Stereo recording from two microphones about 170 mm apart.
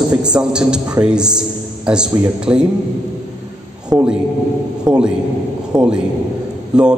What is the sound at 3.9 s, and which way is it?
Speech, 20° right (ahead or behind).